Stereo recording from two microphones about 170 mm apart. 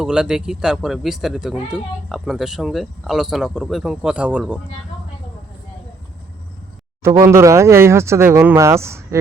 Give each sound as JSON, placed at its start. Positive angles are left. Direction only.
{"t": 0.0, "sound": "speech", "side_deg": -5}
{"t": 7.0, "sound": "speech", "side_deg": -15}